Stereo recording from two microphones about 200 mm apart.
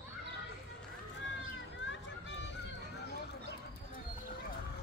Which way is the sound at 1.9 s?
65° left (ahead or behind).